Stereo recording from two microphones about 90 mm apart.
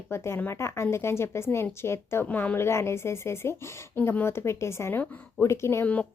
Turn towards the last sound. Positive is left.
turn(degrees=30)  # may be behind; listen again after turning